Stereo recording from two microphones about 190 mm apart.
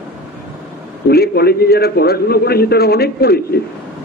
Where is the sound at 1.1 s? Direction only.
55° left (ahead or behind).